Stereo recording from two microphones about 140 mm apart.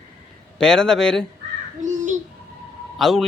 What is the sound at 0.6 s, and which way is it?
Speech, 5° left (ahead or behind).